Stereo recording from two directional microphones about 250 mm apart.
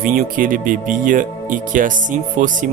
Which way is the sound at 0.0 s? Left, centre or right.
Right.